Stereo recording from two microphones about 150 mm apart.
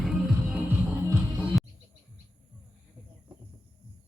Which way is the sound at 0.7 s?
15° right (ahead or behind).